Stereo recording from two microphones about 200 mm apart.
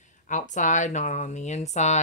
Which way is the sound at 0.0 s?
35° left (ahead or behind).